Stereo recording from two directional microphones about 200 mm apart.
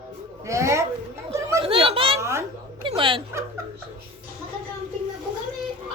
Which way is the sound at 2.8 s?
25° right (ahead or behind).